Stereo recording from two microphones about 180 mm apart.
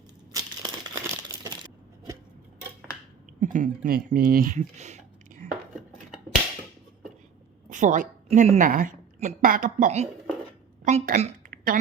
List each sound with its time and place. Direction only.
0.3 s a sound: 20° right (ahead or behind)
3.4 s speech: 45° right (ahead or behind)
7.7 s a woman's voice: 45° right (ahead or behind)